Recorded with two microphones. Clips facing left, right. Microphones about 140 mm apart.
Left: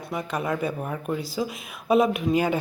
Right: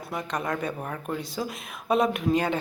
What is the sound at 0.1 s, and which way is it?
A woman's voice, 5° left (ahead or behind).